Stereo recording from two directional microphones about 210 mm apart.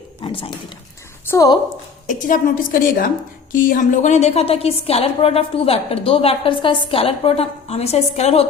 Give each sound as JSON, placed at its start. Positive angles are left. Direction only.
{"t": 0.2, "sound": "a sound", "side_deg": 25}
{"t": 1.3, "sound": "a woman's voice", "side_deg": 15}
{"t": 2.0, "sound": "a woman's voice", "side_deg": 35}